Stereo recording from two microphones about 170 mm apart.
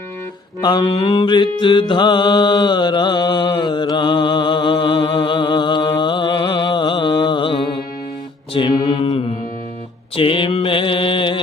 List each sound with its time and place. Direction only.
0.6 s mantra: 25° left (ahead or behind)
10.2 s mantra: 30° left (ahead or behind)